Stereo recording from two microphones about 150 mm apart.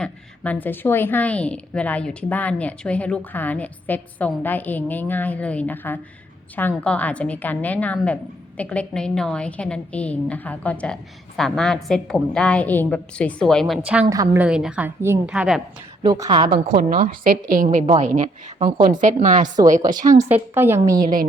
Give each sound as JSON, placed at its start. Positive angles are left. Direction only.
{"t": 0.0, "sound": "a woman's voice", "side_deg": 10}
{"t": 15.3, "sound": "a woman's voice", "side_deg": -5}
{"t": 16.0, "sound": "a woman's voice", "side_deg": -25}
{"t": 16.7, "sound": "a woman's voice", "side_deg": -70}
{"t": 17.5, "sound": "a woman's voice", "side_deg": -60}
{"t": 20.1, "sound": "a woman's voice", "side_deg": -15}